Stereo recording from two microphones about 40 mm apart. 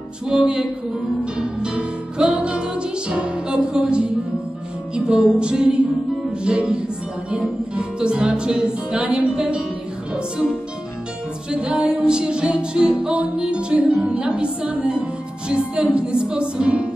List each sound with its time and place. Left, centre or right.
0.3 s music: right
4.9 s music: right
11.5 s music: right
13.0 s music: right
13.4 s music: right
16.6 s music: right